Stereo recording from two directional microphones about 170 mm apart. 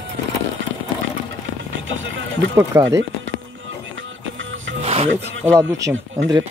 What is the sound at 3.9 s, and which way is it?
Music, 90° right.